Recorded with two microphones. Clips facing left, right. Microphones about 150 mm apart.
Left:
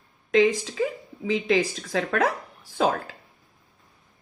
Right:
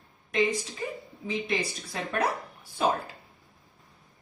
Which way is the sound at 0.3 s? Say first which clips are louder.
Left 7 dB; 90° left.